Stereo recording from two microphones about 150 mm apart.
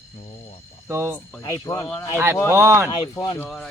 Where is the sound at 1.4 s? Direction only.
20° left (ahead or behind).